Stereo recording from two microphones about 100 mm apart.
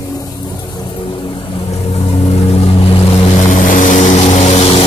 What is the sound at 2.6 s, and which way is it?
Vehicle, 70° left (ahead or behind).